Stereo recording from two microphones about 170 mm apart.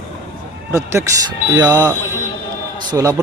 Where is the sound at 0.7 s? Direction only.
20° right (ahead or behind).